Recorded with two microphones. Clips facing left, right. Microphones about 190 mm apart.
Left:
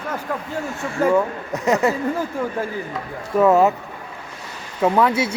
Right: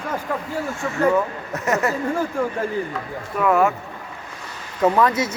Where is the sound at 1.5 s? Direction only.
15° left (ahead or behind).